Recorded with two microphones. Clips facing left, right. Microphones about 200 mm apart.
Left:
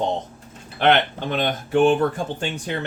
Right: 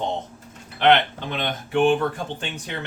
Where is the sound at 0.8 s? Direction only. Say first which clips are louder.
Even; 45° left (ahead or behind).